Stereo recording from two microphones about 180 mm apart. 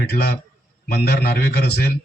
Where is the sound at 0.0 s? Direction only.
65° left (ahead or behind).